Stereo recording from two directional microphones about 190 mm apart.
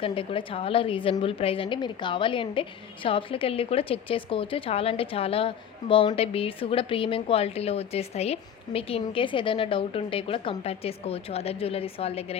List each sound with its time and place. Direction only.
0.0 s a woman's voice: 30° left (ahead or behind)